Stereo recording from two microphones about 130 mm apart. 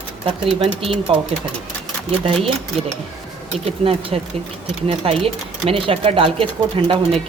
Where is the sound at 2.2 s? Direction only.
45° right (ahead or behind).